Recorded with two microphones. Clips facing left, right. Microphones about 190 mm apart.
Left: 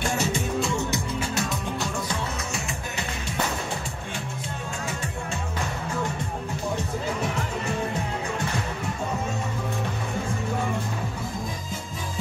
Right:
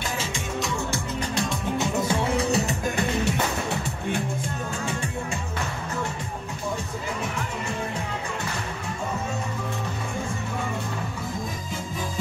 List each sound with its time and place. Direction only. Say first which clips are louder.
0.6 s music: left 2 dB; 25° left (ahead or behind)
1.2 s music: right 1 dB; 5° left (ahead or behind)
1.8 s music: right 5 dB; 25° right (ahead or behind)